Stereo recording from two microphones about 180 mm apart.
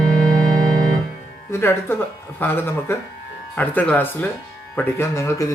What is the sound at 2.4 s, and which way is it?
A man's voice, 10° left (ahead or behind).